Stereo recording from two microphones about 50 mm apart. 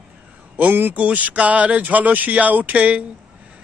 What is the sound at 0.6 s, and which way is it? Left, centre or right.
A man's voice, right.